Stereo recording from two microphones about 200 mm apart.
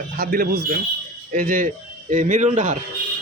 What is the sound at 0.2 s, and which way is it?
A man's voice, 50° right (ahead or behind).